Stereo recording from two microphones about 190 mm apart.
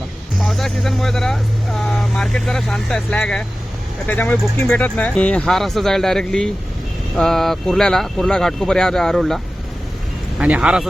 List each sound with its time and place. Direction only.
0.3 s speech: centre (ahead or behind)